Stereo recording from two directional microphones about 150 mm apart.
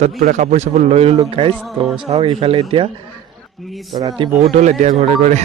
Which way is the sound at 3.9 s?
30° right (ahead or behind).